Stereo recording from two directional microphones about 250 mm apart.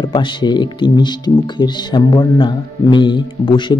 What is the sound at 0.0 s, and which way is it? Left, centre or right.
A man's voice, centre.